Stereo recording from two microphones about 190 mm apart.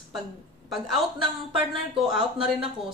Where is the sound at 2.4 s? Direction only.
5° right (ahead or behind).